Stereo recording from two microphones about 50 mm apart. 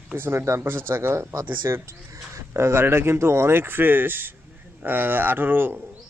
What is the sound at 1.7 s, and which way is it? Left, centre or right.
Speech, right.